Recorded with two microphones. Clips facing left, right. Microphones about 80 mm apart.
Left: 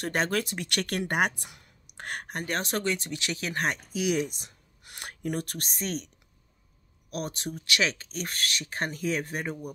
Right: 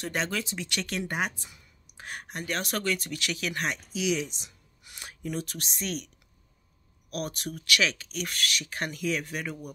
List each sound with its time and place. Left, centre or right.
0.0 s speech: left
2.3 s speech: left
2.6 s speech: left